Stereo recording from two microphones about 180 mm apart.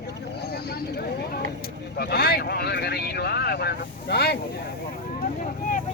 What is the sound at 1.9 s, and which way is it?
Speech, 60° left (ahead or behind).